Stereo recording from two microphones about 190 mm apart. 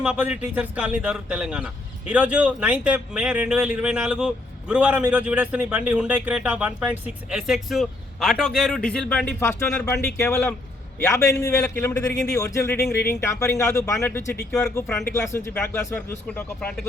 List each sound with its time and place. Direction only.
0.0 s a man's voice: 5° right (ahead or behind)